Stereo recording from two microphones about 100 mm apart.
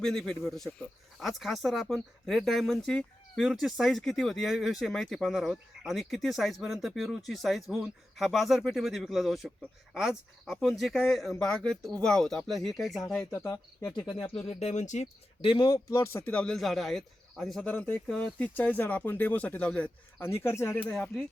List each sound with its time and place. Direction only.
0.0 s speech: 5° left (ahead or behind)
13.3 s speech: 25° left (ahead or behind)
14.3 s speech: 65° left (ahead or behind)
15.4 s speech: 55° left (ahead or behind)
15.9 s speech: 35° left (ahead or behind)
16.2 s speech: 10° left (ahead or behind)
17.7 s speech: 15° left (ahead or behind)
20.2 s speech: 25° left (ahead or behind)